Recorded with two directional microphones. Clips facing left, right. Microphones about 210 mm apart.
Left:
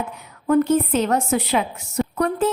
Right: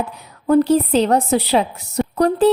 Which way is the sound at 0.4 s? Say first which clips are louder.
Right 3 dB; 35° right (ahead or behind).